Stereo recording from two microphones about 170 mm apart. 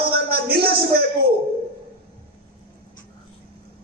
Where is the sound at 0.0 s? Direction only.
65° right (ahead or behind).